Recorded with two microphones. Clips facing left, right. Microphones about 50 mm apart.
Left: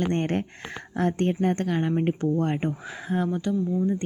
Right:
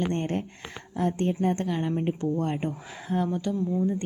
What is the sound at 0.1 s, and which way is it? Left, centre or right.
A woman's voice, left.